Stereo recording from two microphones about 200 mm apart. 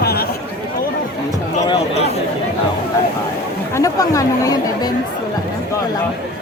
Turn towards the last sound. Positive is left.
turn(degrees=20)  # may be behind; listen again after turning